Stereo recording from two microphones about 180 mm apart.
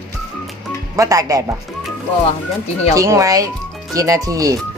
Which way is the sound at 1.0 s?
20° right (ahead or behind).